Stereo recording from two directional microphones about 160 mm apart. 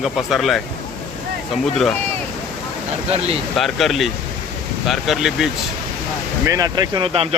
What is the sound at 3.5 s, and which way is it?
Speech, centre (ahead or behind).